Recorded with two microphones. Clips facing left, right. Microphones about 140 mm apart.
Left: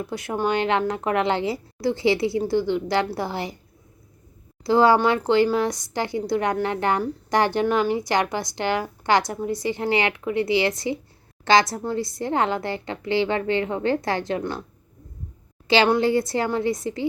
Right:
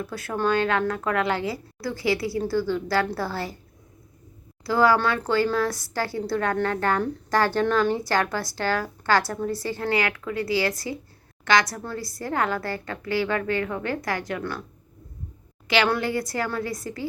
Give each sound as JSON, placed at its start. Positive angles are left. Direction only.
{"t": 0.0, "sound": "a woman's voice", "side_deg": 20}
{"t": 4.6, "sound": "a woman's voice", "side_deg": 25}
{"t": 15.6, "sound": "a woman's voice", "side_deg": 30}